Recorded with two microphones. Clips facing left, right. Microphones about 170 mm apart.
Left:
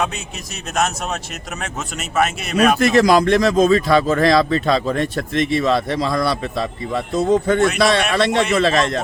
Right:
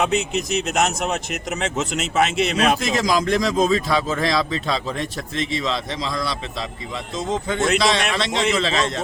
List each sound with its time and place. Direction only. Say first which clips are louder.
0.5 s speech: left 1 dB; 20° right (ahead or behind)
2.6 s speech: left 10 dB; 60° left (ahead or behind)